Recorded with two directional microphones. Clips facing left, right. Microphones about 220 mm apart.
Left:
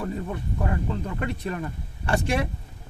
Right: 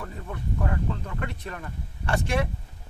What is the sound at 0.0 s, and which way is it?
A man's voice, 20° left (ahead or behind).